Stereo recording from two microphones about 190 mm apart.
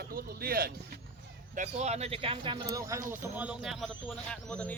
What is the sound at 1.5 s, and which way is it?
Speech, 40° right (ahead or behind).